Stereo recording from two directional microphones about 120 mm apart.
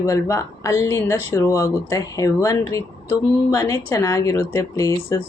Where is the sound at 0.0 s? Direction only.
25° left (ahead or behind).